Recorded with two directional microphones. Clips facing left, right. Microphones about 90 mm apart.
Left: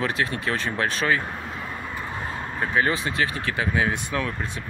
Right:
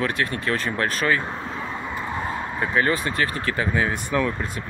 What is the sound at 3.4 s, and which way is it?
Speech, 10° left (ahead or behind).